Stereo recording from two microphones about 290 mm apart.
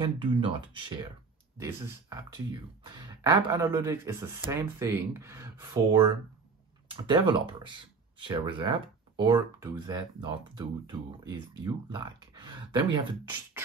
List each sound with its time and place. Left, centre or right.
0.0 s speech: centre